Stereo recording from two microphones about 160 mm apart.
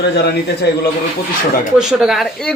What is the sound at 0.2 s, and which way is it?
Speech, 90° left.